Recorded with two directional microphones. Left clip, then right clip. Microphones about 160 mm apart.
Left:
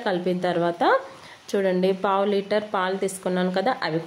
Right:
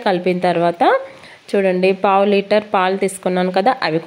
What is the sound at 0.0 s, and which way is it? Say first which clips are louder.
Speech: right 8 dB; 30° right (ahead or behind).